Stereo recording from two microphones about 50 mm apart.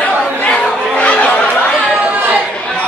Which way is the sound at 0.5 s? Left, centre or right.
Left.